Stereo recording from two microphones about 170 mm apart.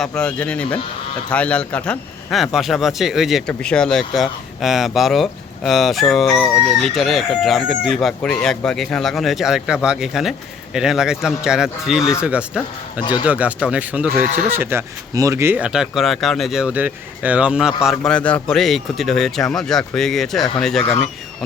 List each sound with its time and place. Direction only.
0.0 s a man's voice: 5° left (ahead or behind)
13.0 s a man's voice: 25° left (ahead or behind)
13.2 s a man's voice: 10° right (ahead or behind)